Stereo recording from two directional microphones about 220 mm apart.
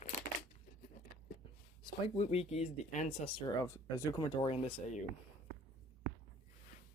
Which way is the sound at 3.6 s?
15° left (ahead or behind).